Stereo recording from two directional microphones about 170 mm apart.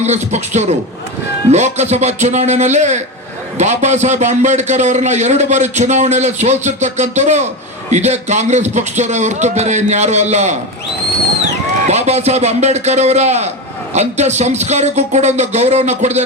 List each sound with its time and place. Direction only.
0.0 s a man's voice: 40° right (ahead or behind)
11.9 s speech: 40° right (ahead or behind)